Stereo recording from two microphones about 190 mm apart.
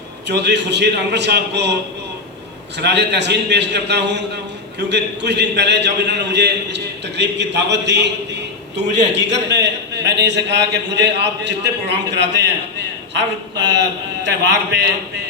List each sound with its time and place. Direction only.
0.3 s a man's voice: 65° right (ahead or behind)
2.7 s a man's voice: 60° right (ahead or behind)